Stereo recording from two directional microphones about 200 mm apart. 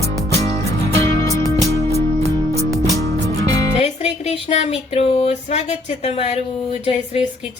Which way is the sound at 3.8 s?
30° left (ahead or behind).